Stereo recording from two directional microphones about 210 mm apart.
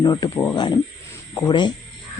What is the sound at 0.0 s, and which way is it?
Speech, 20° left (ahead or behind).